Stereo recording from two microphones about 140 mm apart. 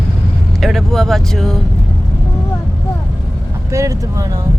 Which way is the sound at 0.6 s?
Centre (ahead or behind).